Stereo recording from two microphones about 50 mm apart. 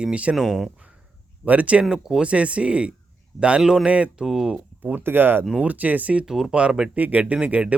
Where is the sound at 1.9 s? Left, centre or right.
Centre.